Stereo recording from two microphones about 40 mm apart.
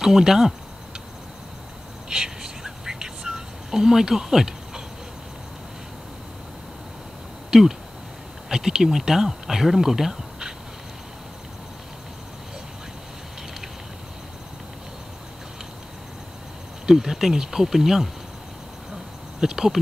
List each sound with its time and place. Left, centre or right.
0.0 s speech: centre
2.0 s whispering: centre
8.5 s speech: centre
16.8 s speech: centre
19.4 s speech: centre